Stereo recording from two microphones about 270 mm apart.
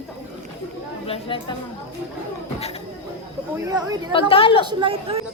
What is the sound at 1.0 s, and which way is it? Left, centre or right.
Speech, centre.